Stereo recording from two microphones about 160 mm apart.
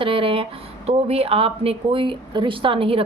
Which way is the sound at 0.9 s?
40° right (ahead or behind).